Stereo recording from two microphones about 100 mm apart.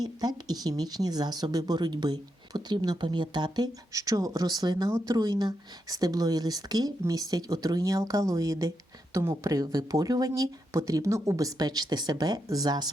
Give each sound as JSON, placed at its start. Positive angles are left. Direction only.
{"t": 0.0, "sound": "speech", "side_deg": -40}
{"t": 4.9, "sound": "speech", "side_deg": -30}
{"t": 5.1, "sound": "speech", "side_deg": -45}